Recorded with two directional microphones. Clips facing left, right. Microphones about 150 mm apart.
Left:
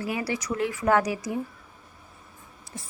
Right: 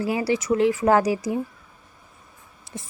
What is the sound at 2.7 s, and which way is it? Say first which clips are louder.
Speech: right 4 dB; 20° right (ahead or behind).